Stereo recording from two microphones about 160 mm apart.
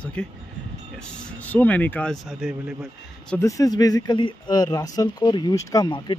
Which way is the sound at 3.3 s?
20° left (ahead or behind).